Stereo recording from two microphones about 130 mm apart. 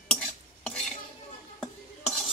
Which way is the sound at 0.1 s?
5° left (ahead or behind).